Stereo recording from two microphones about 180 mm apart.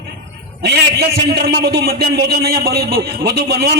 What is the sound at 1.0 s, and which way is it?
A man's voice, 60° right (ahead or behind).